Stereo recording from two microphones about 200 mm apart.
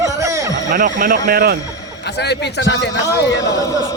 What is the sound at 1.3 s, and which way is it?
Speech, 50° right (ahead or behind).